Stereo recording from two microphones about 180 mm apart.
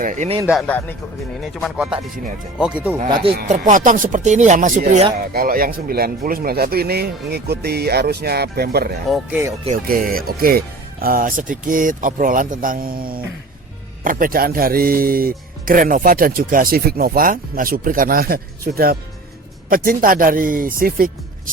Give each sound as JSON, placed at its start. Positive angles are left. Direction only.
{"t": 0.0, "sound": "speech", "side_deg": -45}
{"t": 0.7, "sound": "speech", "side_deg": 10}
{"t": 1.6, "sound": "speech", "side_deg": 0}
{"t": 3.7, "sound": "speech", "side_deg": -45}
{"t": 9.0, "sound": "speech", "side_deg": 0}
{"t": 9.7, "sound": "speech", "side_deg": -50}